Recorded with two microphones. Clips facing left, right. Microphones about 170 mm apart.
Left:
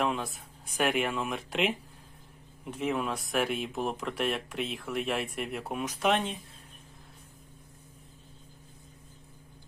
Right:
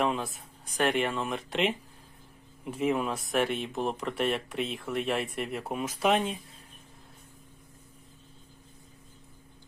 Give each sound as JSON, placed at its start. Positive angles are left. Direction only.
{"t": 0.0, "sound": "speech", "side_deg": 0}